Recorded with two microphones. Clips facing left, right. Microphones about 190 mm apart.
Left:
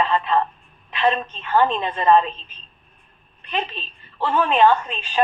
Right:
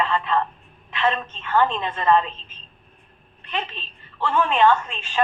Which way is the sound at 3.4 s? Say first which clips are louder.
Left 3 dB; 15° left (ahead or behind).